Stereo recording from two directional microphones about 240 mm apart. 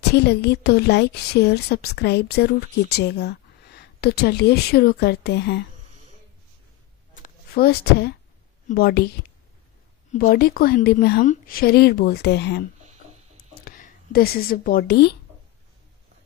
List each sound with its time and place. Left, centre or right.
0.1 s a woman's voice: left
7.2 s a sound: left
8.6 s a woman's voice: left
10.1 s a woman's voice: left
13.7 s speech: left